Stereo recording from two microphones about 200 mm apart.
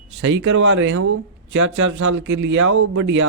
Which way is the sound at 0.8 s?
75° right (ahead or behind).